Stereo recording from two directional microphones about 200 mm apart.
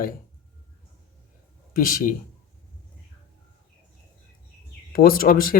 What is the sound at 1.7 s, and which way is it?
Speech, 40° left (ahead or behind).